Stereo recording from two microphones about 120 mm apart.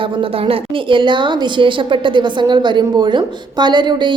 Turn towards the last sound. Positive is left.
turn(degrees=-40)  # may be behind; listen again after turning